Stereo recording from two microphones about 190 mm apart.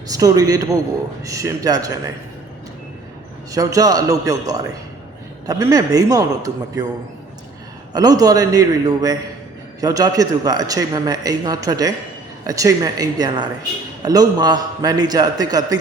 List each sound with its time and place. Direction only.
0.1 s a man's voice: 20° right (ahead or behind)
3.5 s a man's voice: 20° right (ahead or behind)
7.9 s a man's voice: 20° right (ahead or behind)